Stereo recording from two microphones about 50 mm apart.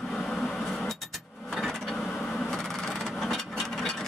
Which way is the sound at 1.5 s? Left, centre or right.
Centre.